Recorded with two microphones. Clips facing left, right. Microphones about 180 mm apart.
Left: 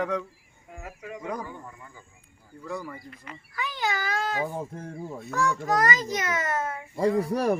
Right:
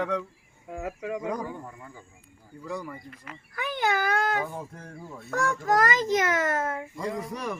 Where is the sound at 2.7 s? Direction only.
5° left (ahead or behind).